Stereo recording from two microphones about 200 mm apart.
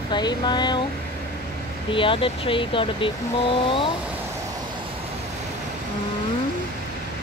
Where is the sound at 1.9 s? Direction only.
25° left (ahead or behind).